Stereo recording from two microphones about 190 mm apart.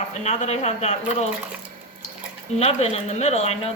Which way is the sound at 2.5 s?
35° left (ahead or behind).